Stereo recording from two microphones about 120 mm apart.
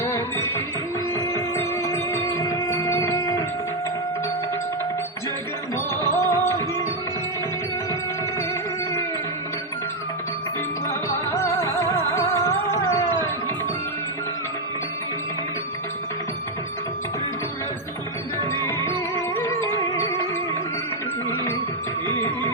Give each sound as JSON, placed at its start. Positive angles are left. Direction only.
{"t": 0.0, "sound": "music", "side_deg": 20}
{"t": 5.9, "sound": "music", "side_deg": 20}
{"t": 10.8, "sound": "music", "side_deg": 20}
{"t": 18.6, "sound": "music", "side_deg": 20}
{"t": 22.0, "sound": "music", "side_deg": 25}